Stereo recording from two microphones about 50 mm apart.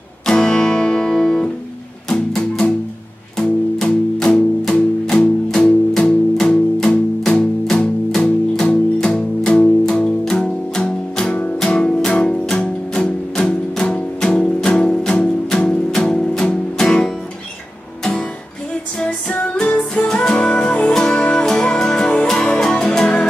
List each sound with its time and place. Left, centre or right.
0.3 s music: centre
19.5 s music: centre
21.5 s music: centre